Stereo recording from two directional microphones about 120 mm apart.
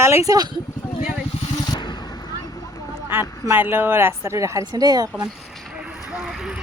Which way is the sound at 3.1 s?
20° right (ahead or behind).